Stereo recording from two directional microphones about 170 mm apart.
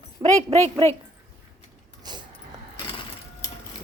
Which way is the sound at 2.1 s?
25° right (ahead or behind).